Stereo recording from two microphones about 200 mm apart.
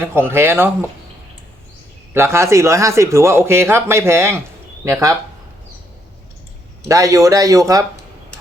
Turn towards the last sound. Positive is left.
turn(degrees=-15)  # may be behind; listen again after turning